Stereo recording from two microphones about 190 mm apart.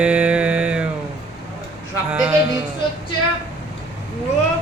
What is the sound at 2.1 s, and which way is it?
Speech, 5° right (ahead or behind).